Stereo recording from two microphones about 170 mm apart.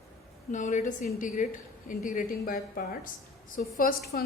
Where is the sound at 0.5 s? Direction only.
45° left (ahead or behind).